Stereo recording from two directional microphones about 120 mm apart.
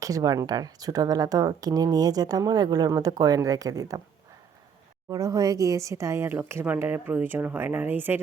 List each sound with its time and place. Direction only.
0.0 s speech: 30° right (ahead or behind)
5.0 s speech: 30° right (ahead or behind)